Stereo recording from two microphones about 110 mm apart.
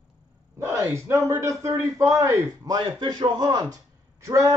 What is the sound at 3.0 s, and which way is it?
Speech, 45° right (ahead or behind).